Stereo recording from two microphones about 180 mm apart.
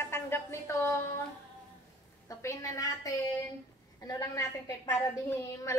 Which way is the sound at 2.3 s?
15° left (ahead or behind).